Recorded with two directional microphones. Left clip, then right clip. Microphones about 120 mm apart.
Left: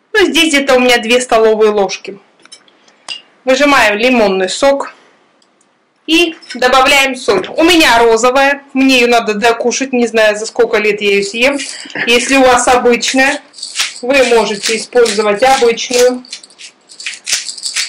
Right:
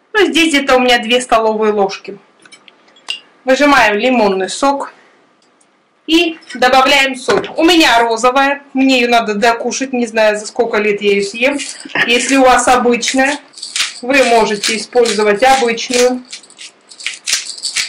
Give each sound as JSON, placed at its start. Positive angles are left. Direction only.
{"t": 0.1, "sound": "speech", "side_deg": 30}
{"t": 3.4, "sound": "speech", "side_deg": 20}
{"t": 6.0, "sound": "speech", "side_deg": 15}
{"t": 14.0, "sound": "speech", "side_deg": 5}